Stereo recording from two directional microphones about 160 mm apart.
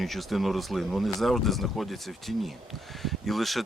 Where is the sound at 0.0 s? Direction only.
Centre (ahead or behind).